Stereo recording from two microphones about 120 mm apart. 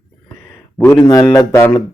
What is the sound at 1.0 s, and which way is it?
Speech, 30° left (ahead or behind).